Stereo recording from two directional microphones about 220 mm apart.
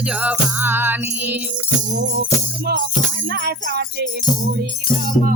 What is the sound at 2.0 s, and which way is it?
Music, 55° right (ahead or behind).